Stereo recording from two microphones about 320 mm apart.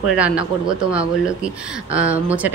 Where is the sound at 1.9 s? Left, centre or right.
Centre.